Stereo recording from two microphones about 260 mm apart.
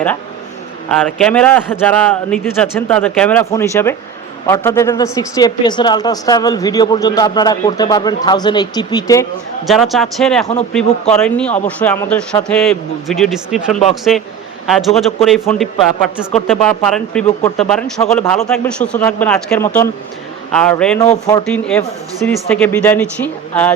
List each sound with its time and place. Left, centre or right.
0.9 s a man's voice: centre
9.6 s a man's voice: centre